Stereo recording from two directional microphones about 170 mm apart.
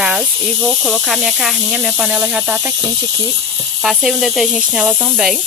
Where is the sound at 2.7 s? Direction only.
25° right (ahead or behind).